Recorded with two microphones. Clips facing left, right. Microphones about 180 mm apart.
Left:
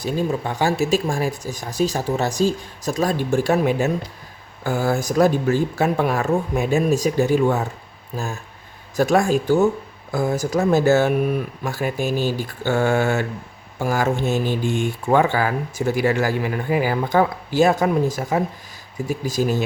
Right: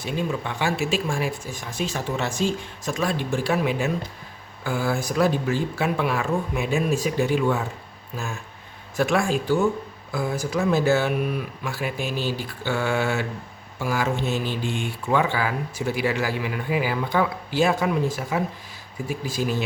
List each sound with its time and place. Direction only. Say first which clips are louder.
0.0 s speech: left 4 dB; 40° left (ahead or behind)